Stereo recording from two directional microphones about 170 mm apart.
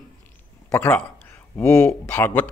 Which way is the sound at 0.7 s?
10° left (ahead or behind).